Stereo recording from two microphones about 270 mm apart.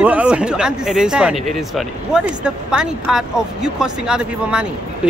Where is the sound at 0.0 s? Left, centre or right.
Centre.